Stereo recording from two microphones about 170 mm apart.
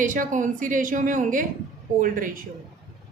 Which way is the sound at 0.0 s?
50° right (ahead or behind).